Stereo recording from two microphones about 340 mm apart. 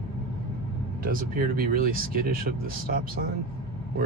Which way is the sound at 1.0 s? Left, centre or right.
Right.